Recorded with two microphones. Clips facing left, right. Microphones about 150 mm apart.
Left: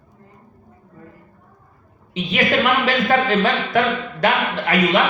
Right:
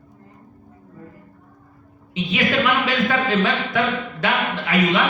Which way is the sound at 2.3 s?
45° left (ahead or behind).